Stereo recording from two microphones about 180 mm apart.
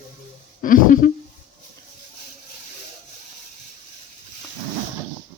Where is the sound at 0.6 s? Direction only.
50° left (ahead or behind).